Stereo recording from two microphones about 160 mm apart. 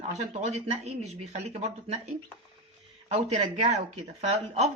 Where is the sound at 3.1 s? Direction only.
40° right (ahead or behind).